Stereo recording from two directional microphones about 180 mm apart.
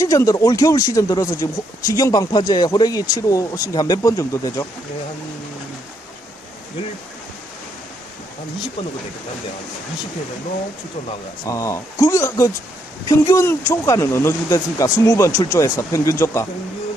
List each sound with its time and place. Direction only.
0.0 s speech: 20° left (ahead or behind)
11.4 s speech: 15° left (ahead or behind)